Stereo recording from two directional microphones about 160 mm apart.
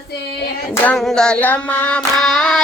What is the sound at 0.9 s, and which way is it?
Child singing, 5° left (ahead or behind).